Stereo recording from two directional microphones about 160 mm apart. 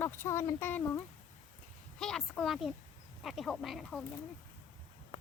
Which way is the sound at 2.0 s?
5° left (ahead or behind).